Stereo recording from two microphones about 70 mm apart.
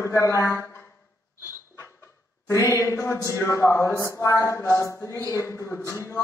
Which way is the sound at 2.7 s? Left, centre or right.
Left.